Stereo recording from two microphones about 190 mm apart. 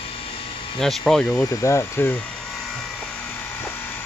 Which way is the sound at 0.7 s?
Centre (ahead or behind).